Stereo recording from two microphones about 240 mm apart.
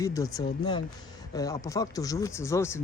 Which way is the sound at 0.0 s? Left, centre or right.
Centre.